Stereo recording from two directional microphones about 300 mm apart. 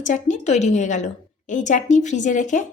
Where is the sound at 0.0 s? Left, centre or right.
Left.